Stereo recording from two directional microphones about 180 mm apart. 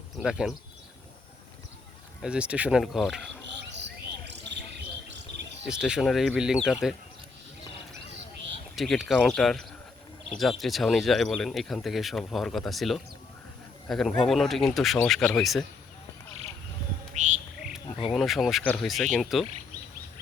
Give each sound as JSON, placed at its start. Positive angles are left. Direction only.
{"t": 0.2, "sound": "speech", "side_deg": -5}
{"t": 2.2, "sound": "speech", "side_deg": -5}
{"t": 3.7, "sound": "bird", "side_deg": -75}
{"t": 5.6, "sound": "speech", "side_deg": -5}
{"t": 8.7, "sound": "speech", "side_deg": 0}
{"t": 17.2, "sound": "frog", "side_deg": -45}
{"t": 18.1, "sound": "speech", "side_deg": 0}